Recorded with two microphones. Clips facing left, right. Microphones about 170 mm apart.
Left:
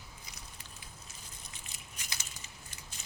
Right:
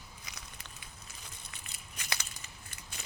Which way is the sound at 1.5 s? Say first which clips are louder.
Right 1 dB; 65° right (ahead or behind).